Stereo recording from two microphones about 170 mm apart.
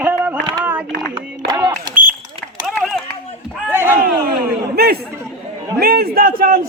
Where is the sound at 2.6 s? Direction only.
Centre (ahead or behind).